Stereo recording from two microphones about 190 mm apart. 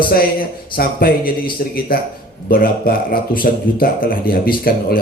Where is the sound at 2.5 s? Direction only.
50° left (ahead or behind).